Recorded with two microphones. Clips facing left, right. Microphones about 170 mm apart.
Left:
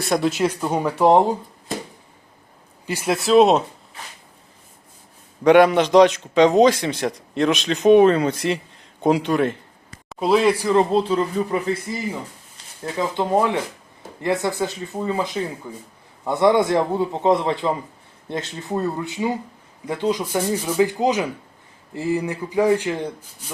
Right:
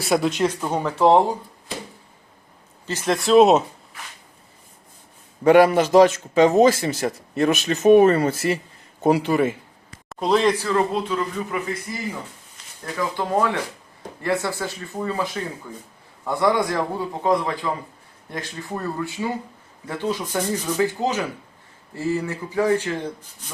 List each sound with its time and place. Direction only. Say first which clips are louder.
0.0 s speech: even; centre (ahead or behind); by 1.4 s 15° left (ahead or behind)
2.8 s a man's voice: even; 10° left (ahead or behind)
5.4 s a man's voice: left 1 dB; 5° right (ahead or behind); by 10.8 s 15° left (ahead or behind)
10.9 s speech: left 5 dB; 30° left (ahead or behind)
12.8 s a man's voice: left 3 dB; 25° left (ahead or behind)